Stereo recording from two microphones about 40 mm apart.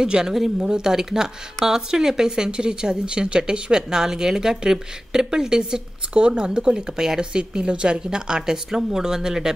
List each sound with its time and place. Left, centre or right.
0.0 s speech: centre